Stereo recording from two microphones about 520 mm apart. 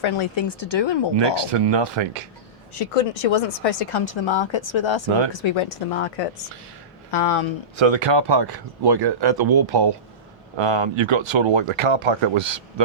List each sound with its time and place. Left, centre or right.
0.0 s speech: left
1.1 s speech: right
2.7 s speech: left
7.8 s speech: right
10.6 s speech: right